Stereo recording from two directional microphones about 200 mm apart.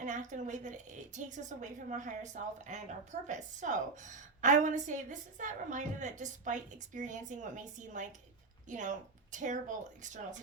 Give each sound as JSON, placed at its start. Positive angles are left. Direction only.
{"t": 0.0, "sound": "a woman's voice", "side_deg": -40}